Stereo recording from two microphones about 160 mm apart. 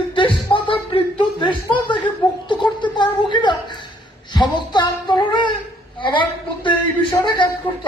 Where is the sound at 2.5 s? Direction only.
30° left (ahead or behind).